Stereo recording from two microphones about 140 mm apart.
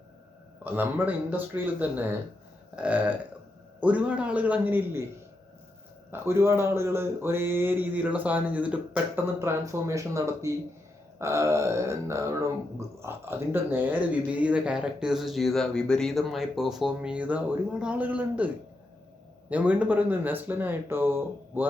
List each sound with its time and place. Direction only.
0.6 s speech: 15° right (ahead or behind)
6.1 s speech: 20° right (ahead or behind)
11.2 s a sound: 20° right (ahead or behind)
13.0 s speech: 15° right (ahead or behind)